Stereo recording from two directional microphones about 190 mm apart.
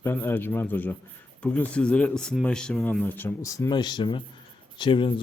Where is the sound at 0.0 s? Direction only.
10° left (ahead or behind).